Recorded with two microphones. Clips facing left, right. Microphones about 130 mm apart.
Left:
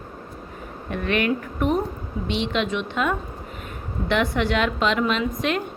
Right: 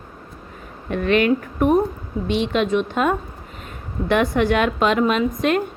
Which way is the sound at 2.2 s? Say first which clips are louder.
Right 4 dB; 45° right (ahead or behind).